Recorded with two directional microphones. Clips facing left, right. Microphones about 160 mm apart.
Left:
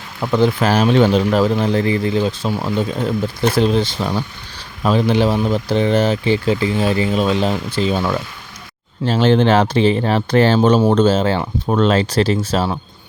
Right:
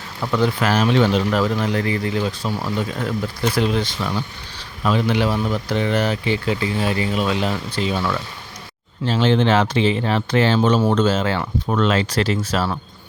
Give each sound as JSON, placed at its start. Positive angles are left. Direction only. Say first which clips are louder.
{"t": 0.2, "sound": "speech", "louder": "left 4 dB", "side_deg": 25}
{"t": 3.5, "sound": "speech", "louder": "left 5 dB", "side_deg": 30}
{"t": 9.0, "sound": "speech", "louder": "left 4 dB", "side_deg": 40}